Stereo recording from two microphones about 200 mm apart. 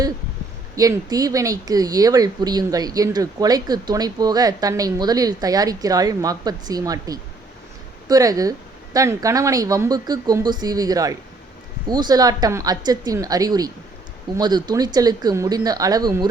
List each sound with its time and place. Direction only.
0.8 s speech: 15° right (ahead or behind)